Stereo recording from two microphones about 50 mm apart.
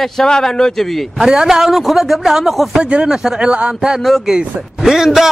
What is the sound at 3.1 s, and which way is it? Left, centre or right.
Speech, centre.